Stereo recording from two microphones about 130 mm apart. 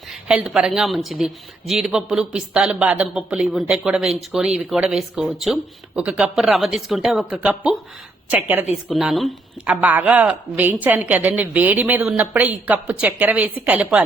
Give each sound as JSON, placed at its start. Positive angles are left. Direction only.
{"t": 0.1, "sound": "a woman's voice", "side_deg": -5}
{"t": 8.9, "sound": "a woman's voice", "side_deg": 0}
{"t": 9.8, "sound": "a woman's voice", "side_deg": -10}